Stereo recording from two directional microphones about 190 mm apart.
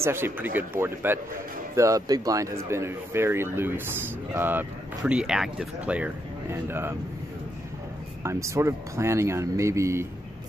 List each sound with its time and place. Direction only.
0.0 s speech: 10° right (ahead or behind)
8.2 s speech: 15° right (ahead or behind)